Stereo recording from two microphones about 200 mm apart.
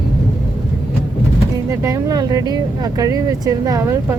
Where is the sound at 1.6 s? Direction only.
15° right (ahead or behind).